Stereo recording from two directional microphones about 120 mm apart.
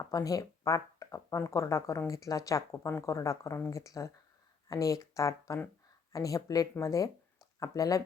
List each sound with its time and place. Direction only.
0.0 s speech: 30° left (ahead or behind)